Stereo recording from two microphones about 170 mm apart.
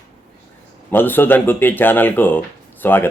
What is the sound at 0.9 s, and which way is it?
Speech, 10° left (ahead or behind).